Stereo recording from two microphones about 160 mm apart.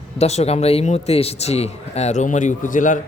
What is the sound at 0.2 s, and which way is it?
A man's voice, 40° left (ahead or behind).